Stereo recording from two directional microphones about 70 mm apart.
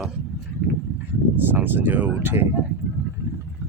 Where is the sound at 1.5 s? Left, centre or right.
Right.